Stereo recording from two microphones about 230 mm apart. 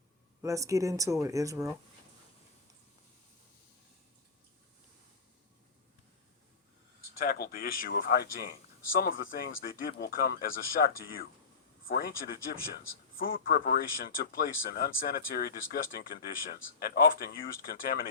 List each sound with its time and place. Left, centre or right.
0.4 s speech: centre
7.1 s speech: left
9.6 s speech: left